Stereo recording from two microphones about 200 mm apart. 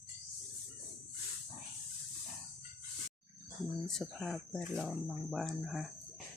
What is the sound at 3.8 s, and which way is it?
Speech, centre (ahead or behind).